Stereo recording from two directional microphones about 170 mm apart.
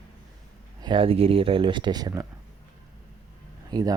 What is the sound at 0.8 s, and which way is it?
Speech, 30° right (ahead or behind).